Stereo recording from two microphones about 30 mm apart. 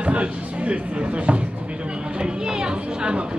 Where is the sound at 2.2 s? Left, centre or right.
Right.